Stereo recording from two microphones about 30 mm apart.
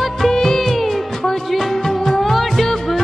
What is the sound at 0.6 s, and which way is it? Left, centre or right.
Music, centre.